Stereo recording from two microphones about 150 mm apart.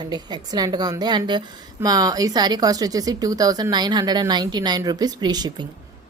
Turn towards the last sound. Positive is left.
turn(degrees=-25)  # may be behind; listen again after turning